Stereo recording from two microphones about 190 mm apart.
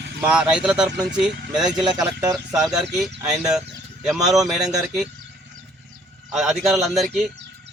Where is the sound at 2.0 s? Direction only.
20° right (ahead or behind).